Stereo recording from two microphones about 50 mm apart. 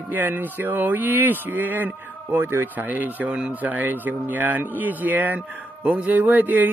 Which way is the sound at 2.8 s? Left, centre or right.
Right.